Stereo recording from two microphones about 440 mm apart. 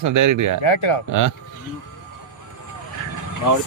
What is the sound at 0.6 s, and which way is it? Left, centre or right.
Speech, left.